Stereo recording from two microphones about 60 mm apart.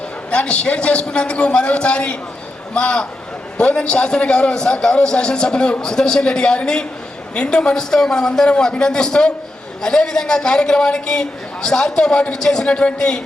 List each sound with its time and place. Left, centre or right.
0.3 s a man's voice: centre